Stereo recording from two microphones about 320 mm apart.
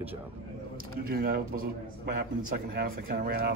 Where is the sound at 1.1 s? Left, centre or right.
Right.